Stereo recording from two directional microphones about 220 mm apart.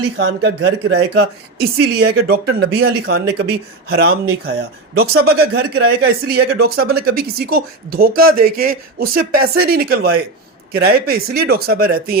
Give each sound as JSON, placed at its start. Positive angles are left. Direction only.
{"t": 0.2, "sound": "speech", "side_deg": -60}